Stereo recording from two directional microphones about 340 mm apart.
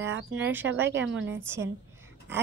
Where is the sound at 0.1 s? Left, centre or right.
Right.